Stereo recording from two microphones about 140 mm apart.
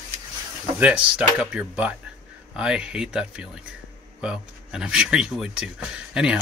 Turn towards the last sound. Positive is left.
turn(degrees=-5)  # may be behind; listen again after turning